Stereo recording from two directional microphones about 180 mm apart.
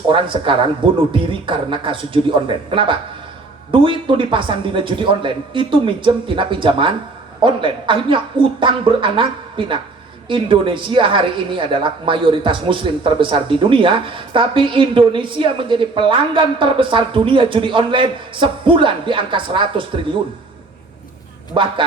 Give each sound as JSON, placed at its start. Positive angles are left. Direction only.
{"t": 0.1, "sound": "a woman's voice", "side_deg": -30}
{"t": 21.5, "sound": "a woman's voice", "side_deg": -30}